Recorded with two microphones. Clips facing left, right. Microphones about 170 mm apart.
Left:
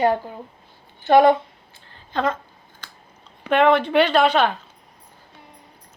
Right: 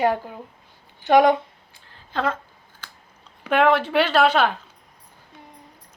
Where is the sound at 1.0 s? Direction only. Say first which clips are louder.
Left 2 dB; 15° right (ahead or behind).